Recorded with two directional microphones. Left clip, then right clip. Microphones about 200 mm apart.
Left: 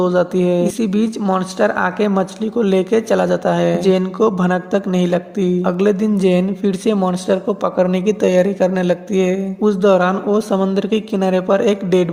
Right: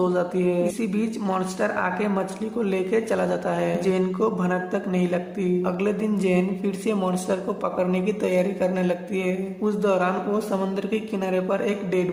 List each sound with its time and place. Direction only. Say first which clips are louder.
0.0 s speech: left 7 dB; 35° left (ahead or behind)